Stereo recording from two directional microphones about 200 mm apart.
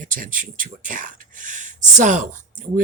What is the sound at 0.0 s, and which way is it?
Speech, 40° right (ahead or behind).